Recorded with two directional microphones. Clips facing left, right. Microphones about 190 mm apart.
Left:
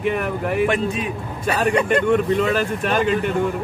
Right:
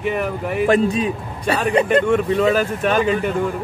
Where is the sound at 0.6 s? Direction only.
35° right (ahead or behind).